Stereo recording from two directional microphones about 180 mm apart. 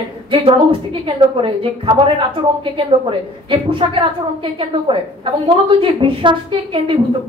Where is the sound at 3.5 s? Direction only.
30° right (ahead or behind).